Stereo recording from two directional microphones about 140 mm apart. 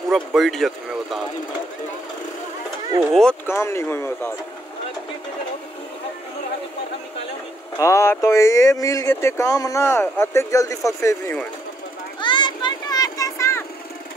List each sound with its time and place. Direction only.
0.1 s speech: centre (ahead or behind)
3.0 s speech: centre (ahead or behind)
3.4 s speech: 20° left (ahead or behind)
7.8 s speech: 20° left (ahead or behind)
12.2 s children playing: 35° left (ahead or behind)